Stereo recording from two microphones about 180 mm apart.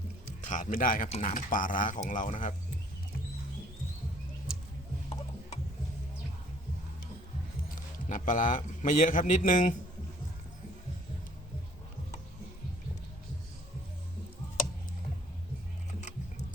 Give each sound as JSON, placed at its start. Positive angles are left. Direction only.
{"t": 0.4, "sound": "speech", "side_deg": 45}
{"t": 8.1, "sound": "speech", "side_deg": 45}